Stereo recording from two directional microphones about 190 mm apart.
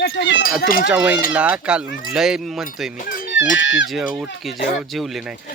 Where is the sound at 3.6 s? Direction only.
75° left (ahead or behind).